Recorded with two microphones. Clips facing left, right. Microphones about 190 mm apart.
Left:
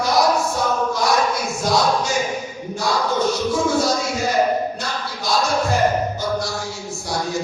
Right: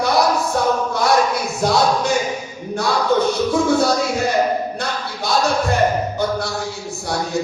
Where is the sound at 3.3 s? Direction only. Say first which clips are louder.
Right 3 dB; 60° right (ahead or behind).